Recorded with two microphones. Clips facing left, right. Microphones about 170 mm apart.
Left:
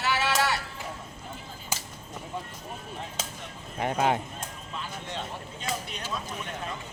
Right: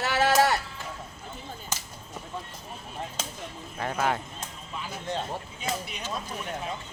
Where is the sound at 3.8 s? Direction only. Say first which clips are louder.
Left 2 dB; 20° left (ahead or behind).